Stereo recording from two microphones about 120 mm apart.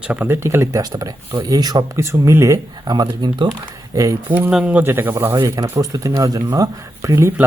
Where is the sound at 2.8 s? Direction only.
35° right (ahead or behind).